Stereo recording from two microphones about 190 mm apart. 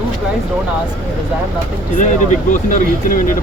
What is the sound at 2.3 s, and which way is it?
Speech, 45° left (ahead or behind).